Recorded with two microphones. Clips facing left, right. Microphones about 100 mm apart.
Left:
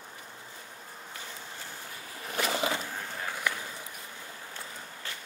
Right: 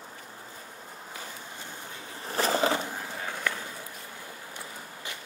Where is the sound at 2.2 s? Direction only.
35° right (ahead or behind).